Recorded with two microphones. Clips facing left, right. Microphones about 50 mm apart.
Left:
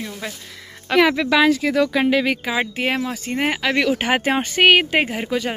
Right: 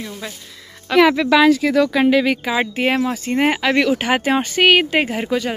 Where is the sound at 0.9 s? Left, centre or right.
Centre.